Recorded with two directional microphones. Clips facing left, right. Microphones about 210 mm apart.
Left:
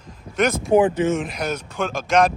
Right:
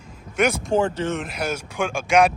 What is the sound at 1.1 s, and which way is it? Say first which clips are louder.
Speech: left 3 dB; centre (ahead or behind).